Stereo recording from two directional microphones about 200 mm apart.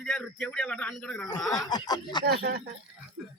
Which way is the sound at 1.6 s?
20° left (ahead or behind).